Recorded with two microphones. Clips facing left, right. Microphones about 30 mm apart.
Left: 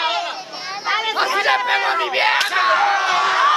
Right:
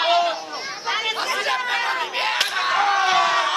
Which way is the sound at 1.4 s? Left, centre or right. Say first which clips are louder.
Left 6 dB; left.